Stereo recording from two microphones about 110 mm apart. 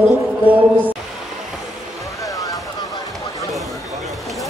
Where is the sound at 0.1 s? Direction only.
15° right (ahead or behind).